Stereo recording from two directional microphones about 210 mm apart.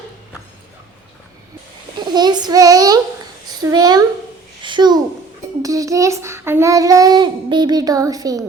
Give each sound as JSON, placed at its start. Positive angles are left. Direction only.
{"t": 2.0, "sound": "child singing", "side_deg": -20}
{"t": 3.6, "sound": "a child's voice", "side_deg": -20}
{"t": 5.6, "sound": "child singing", "side_deg": -15}